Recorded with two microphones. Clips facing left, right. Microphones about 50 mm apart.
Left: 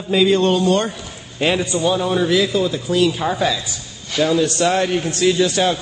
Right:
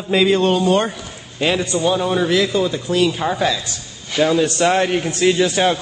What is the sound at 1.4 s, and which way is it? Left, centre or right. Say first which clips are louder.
Speech: even; centre.